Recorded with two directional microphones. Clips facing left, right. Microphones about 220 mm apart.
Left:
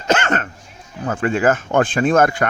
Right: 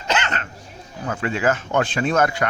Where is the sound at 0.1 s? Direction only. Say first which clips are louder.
Left 6 dB; 50° left (ahead or behind).